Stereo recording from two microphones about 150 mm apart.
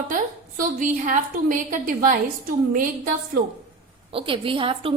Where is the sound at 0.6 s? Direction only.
60° right (ahead or behind).